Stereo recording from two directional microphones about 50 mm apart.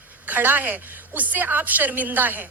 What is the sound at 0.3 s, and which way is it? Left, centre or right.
A woman's voice, right.